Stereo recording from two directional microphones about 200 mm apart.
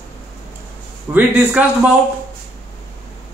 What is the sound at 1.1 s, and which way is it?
Speech, 5° right (ahead or behind).